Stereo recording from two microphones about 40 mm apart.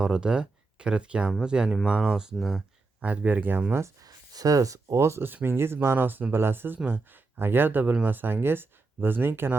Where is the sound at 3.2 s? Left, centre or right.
Right.